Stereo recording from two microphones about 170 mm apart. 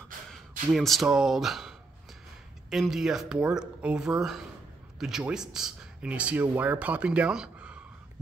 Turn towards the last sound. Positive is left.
turn(degrees=-5)  # may be behind; listen again after turning